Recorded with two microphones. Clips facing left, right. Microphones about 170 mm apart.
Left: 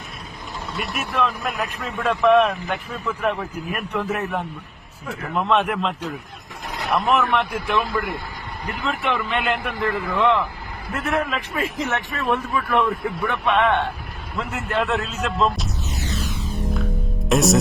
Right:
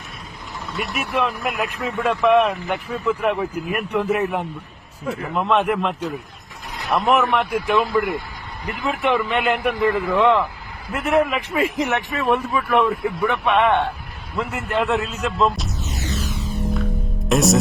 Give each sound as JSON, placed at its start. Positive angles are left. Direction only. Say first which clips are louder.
{"t": 0.9, "sound": "a man's voice", "louder": "right 1 dB", "side_deg": -15}
{"t": 6.9, "sound": "a man's voice", "louder": "right 2 dB", "side_deg": -15}
{"t": 9.0, "sound": "a man's voice", "louder": "right 4 dB", "side_deg": -15}
{"t": 17.2, "sound": "speech", "louder": "right 1 dB", "side_deg": 0}